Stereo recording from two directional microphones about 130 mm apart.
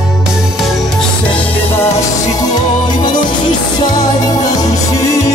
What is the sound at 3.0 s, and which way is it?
Music, 35° left (ahead or behind).